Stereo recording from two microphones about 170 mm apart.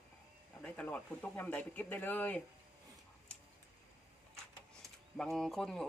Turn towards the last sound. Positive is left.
turn(degrees=5)  # may be behind; listen again after turning